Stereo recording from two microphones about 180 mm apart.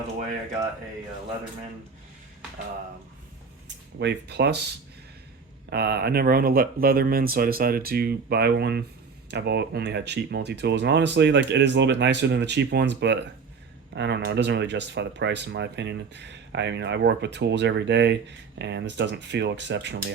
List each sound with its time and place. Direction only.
3.9 s speech: 70° right (ahead or behind)
5.7 s speech: 60° right (ahead or behind)